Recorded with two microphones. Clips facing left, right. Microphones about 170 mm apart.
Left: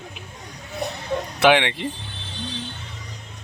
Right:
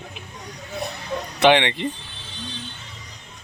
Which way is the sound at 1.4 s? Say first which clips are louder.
Right 1 dB; 5° left (ahead or behind).